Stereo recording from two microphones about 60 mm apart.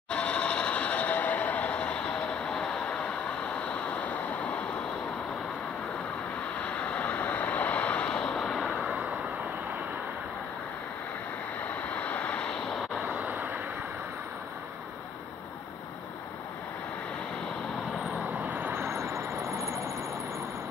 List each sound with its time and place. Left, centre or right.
0.1 s vehicle: centre
3.6 s waves: left
6.6 s vehicle: left
11.6 s vehicle: left
13.1 s vehicle: right
18.5 s vehicle: right